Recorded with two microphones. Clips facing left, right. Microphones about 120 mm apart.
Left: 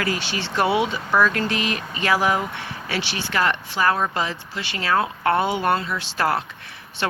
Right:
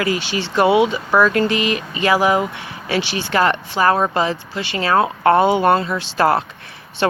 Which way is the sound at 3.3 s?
30° right (ahead or behind).